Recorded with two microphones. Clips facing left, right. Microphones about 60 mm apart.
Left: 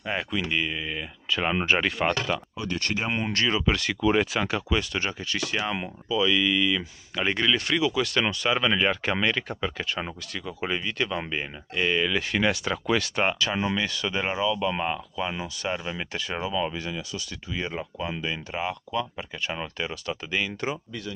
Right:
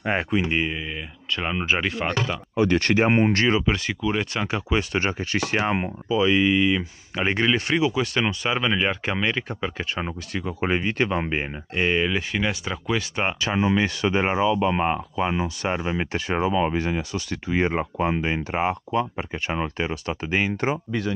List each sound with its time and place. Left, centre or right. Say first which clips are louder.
0.0 s speech: right 6 dB; right
1.3 s speech: even; centre
2.5 s speech: right 10 dB; right
3.3 s speech: right 5 dB; right
3.6 s speech: right 1 dB; centre
4.0 s speech: left 5 dB; centre
4.5 s speech: right 2 dB; right
10.4 s speech: right 5 dB; right
12.2 s speech: left 1 dB; centre
13.7 s speech: right 6 dB; right